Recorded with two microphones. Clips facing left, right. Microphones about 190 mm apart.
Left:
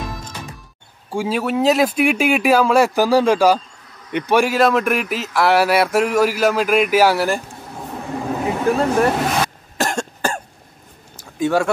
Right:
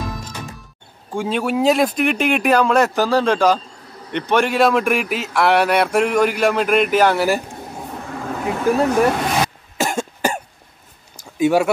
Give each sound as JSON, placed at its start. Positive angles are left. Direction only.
{"t": 0.0, "sound": "music", "side_deg": 0}
{"t": 1.1, "sound": "speech", "side_deg": 5}
{"t": 8.1, "sound": "vehicle", "side_deg": 15}
{"t": 8.5, "sound": "speech", "side_deg": 0}
{"t": 9.8, "sound": "cough", "side_deg": 0}
{"t": 11.3, "sound": "speech", "side_deg": -10}